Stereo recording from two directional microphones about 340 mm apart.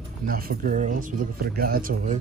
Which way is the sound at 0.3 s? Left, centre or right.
Right.